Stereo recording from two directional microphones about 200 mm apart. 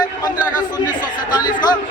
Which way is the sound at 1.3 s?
20° left (ahead or behind).